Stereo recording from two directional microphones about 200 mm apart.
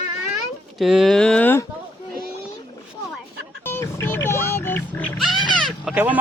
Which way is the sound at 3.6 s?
10° left (ahead or behind).